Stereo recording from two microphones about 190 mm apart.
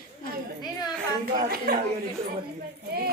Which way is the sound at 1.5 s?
50° right (ahead or behind).